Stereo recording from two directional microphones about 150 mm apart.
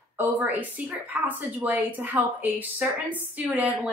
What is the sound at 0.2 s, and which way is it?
Speech, 10° right (ahead or behind).